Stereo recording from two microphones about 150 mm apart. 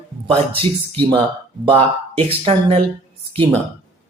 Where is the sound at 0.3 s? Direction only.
35° right (ahead or behind).